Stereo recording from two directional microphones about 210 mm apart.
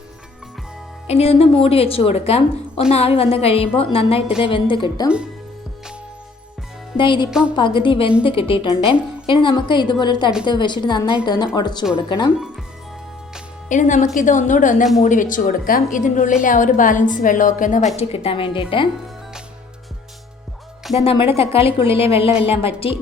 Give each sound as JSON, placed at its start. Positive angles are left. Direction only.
{"t": 1.0, "sound": "a woman's voice", "side_deg": 30}
{"t": 6.9, "sound": "a woman's voice", "side_deg": 25}
{"t": 7.3, "sound": "a woman's voice", "side_deg": -5}
{"t": 7.5, "sound": "a woman's voice", "side_deg": 25}
{"t": 13.7, "sound": "a woman's voice", "side_deg": 35}
{"t": 21.0, "sound": "a woman's voice", "side_deg": 25}